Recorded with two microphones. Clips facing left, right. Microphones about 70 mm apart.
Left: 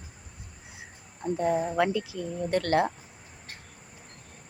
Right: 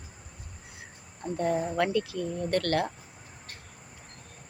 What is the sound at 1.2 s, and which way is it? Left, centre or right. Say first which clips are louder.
Speech: left 2 dB; centre.